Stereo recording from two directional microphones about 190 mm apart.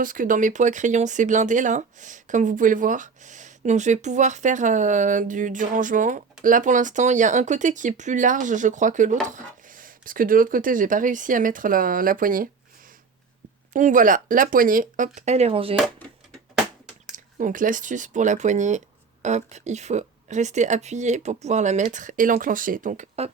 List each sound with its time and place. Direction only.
0.0 s speech: 45° right (ahead or behind)
13.7 s speech: 45° right (ahead or behind)
17.3 s speech: 45° right (ahead or behind)